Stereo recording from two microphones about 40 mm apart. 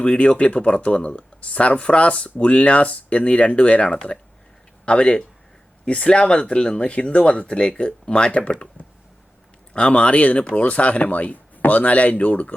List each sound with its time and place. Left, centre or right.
0.0 s speech: left
3.9 s speech: left
9.7 s speech: left